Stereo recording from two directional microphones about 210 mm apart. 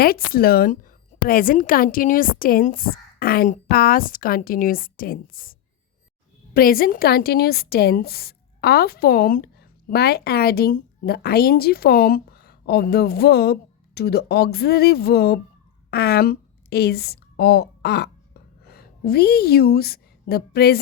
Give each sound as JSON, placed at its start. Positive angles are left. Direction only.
{"t": 0.0, "sound": "a woman's voice", "side_deg": 45}